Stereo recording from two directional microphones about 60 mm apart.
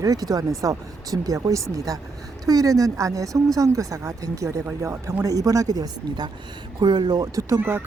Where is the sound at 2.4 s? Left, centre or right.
Right.